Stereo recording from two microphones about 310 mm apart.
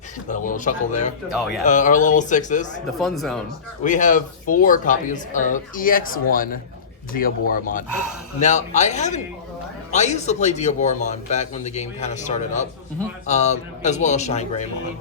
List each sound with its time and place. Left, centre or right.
0.3 s speech: left
3.0 s speech: centre
3.8 s speech: left